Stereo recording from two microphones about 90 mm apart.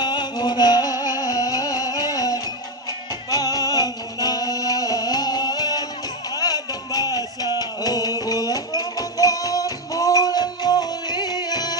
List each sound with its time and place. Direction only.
0.0 s music: 50° left (ahead or behind)